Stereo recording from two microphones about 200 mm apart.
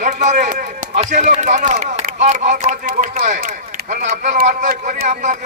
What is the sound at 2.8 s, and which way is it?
A man's voice, 45° right (ahead or behind).